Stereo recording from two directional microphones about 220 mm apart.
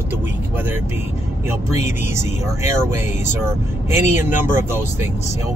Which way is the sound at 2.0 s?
10° right (ahead or behind).